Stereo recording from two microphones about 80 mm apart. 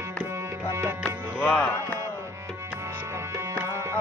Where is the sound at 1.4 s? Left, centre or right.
Centre.